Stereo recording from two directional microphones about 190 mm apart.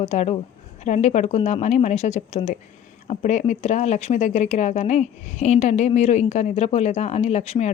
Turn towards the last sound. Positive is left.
turn(degrees=35)  # may be behind; listen again after turning